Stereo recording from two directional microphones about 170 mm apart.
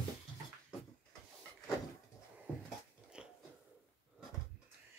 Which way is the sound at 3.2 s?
5° right (ahead or behind).